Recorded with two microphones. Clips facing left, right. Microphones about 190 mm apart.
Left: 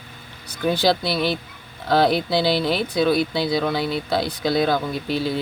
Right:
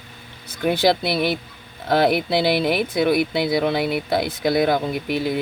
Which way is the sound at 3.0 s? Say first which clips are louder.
Even; 20° right (ahead or behind).